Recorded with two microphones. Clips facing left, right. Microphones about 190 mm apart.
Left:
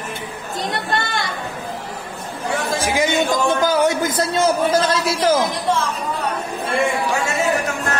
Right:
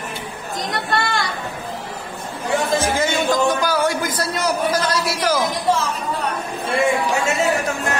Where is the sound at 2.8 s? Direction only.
15° left (ahead or behind).